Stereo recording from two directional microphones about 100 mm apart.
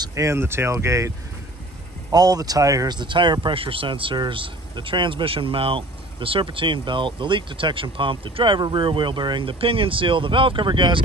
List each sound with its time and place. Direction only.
0.1 s speech: 30° right (ahead or behind)
3.0 s speech: 50° right (ahead or behind)